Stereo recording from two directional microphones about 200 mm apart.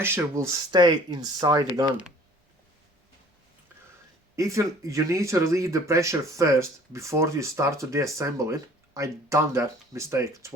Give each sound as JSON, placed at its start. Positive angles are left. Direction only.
{"t": 0.0, "sound": "speech", "side_deg": -10}
{"t": 4.4, "sound": "speech", "side_deg": -15}